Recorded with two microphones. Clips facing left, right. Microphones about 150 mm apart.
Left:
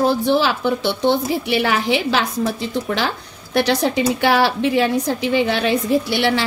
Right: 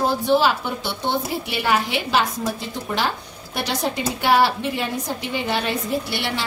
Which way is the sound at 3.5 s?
85° left.